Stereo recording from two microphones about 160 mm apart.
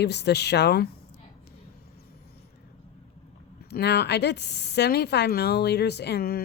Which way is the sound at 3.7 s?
90° left.